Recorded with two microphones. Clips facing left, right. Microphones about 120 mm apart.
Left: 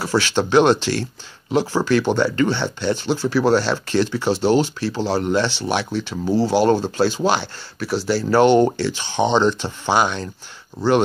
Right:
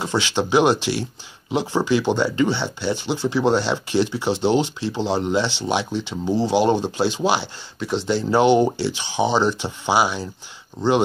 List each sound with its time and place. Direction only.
0.0 s speech: 15° right (ahead or behind)